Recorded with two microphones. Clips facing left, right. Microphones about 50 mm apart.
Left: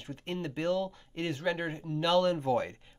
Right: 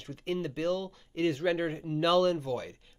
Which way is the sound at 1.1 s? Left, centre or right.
Centre.